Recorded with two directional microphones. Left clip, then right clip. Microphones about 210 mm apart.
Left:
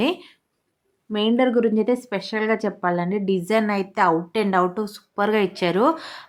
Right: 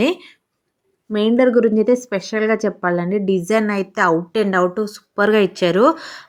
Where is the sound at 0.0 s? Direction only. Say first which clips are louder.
Right 4 dB; 20° right (ahead or behind).